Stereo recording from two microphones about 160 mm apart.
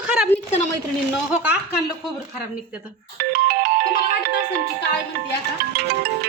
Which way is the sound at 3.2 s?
70° right (ahead or behind).